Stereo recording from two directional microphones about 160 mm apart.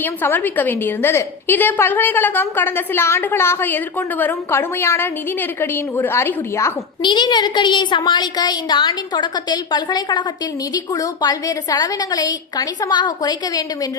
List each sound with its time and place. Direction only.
0.0 s a woman's voice: 10° left (ahead or behind)
7.0 s a woman's voice: 30° left (ahead or behind)